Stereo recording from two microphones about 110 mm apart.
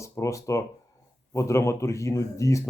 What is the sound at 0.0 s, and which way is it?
Speech, 25° left (ahead or behind).